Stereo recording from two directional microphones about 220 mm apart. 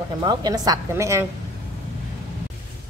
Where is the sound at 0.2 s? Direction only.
20° right (ahead or behind).